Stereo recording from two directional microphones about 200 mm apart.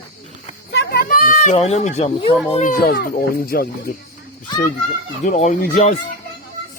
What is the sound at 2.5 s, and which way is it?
Speech, 40° left (ahead or behind).